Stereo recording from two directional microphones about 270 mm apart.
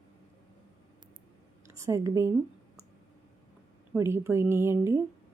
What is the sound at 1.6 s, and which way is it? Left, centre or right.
Speech, centre.